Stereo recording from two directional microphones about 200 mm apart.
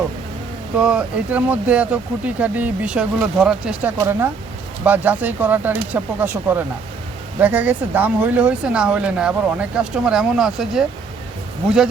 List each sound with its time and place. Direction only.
0.8 s speech: 5° right (ahead or behind)